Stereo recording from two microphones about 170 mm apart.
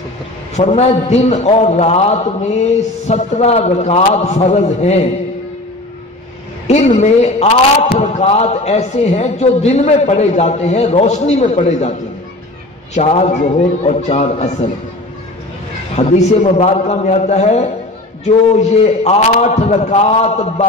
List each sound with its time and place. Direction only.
0.6 s a man's voice: 40° left (ahead or behind)
7.0 s a man's voice: 40° left (ahead or behind)
12.9 s a man's voice: 40° left (ahead or behind)
16.1 s a man's voice: 40° left (ahead or behind)